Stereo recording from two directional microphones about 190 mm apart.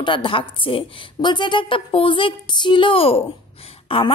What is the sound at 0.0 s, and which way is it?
A woman's voice, 25° left (ahead or behind).